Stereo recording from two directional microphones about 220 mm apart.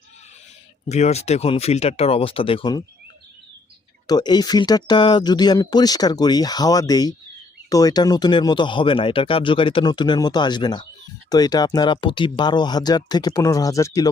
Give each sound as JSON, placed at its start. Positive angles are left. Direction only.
{"t": 0.9, "sound": "speech", "side_deg": 30}
{"t": 4.0, "sound": "speech", "side_deg": 20}